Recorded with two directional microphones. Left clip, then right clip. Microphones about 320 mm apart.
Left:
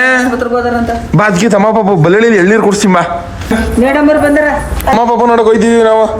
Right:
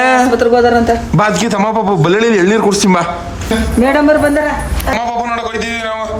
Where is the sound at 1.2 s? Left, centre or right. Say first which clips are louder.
Left 8 dB; centre.